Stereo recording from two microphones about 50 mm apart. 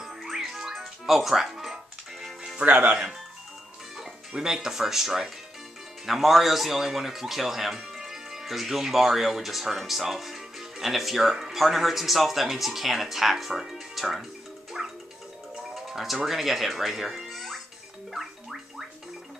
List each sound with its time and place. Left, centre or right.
0.0 s music: centre
2.6 s speech: right
4.3 s speech: centre
14.8 s music: centre
15.7 s speech: centre
18.1 s a sound: centre